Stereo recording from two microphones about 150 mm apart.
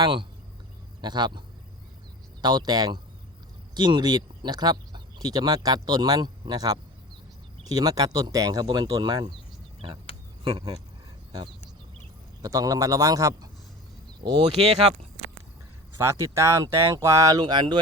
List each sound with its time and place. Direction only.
0.0 s speech: 35° right (ahead or behind)
12.4 s speech: 25° right (ahead or behind)
14.6 s speech: 40° right (ahead or behind)
16.0 s speech: 20° right (ahead or behind)